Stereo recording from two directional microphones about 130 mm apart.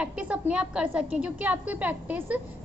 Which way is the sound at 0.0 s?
10° right (ahead or behind).